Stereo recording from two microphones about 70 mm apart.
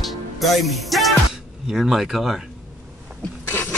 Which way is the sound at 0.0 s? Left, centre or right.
Centre.